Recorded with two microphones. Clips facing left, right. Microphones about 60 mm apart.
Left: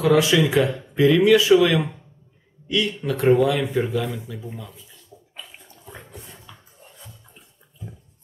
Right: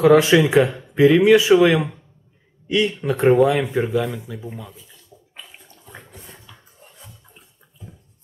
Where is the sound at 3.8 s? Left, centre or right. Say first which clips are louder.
Right 3 dB; centre.